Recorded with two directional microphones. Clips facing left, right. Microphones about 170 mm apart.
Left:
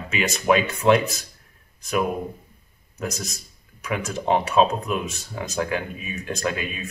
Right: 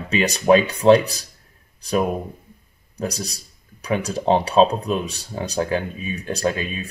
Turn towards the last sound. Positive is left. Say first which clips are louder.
# right 4 dB
turn(degrees=-30)  # may be behind; listen again after turning